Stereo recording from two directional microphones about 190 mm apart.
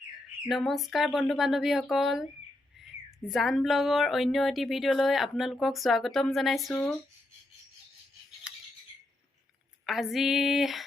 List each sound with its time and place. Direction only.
0.4 s speech: centre (ahead or behind)
3.2 s speech: centre (ahead or behind)
8.5 s a sound: 5° right (ahead or behind)
9.8 s speech: centre (ahead or behind)